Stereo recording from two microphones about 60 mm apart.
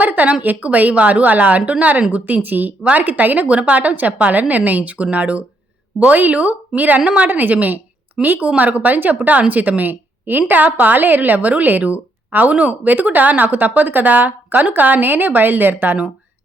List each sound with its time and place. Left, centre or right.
0.0 s a woman's voice: right